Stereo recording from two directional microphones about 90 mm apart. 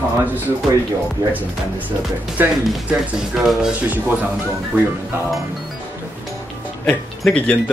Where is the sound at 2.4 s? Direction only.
20° right (ahead or behind).